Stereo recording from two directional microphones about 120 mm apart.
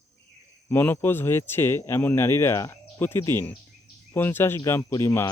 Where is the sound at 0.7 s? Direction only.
15° left (ahead or behind).